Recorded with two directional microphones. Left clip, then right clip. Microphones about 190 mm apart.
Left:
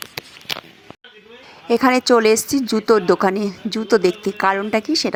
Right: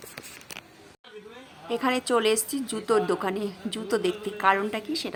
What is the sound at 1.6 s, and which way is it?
Speech, 35° left (ahead or behind).